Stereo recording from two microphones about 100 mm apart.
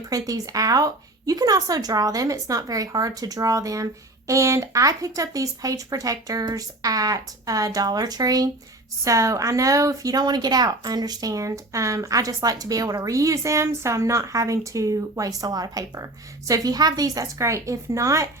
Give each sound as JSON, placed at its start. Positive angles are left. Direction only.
{"t": 0.1, "sound": "speech", "side_deg": -35}